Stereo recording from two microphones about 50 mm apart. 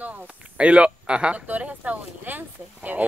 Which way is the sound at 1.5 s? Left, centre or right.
Right.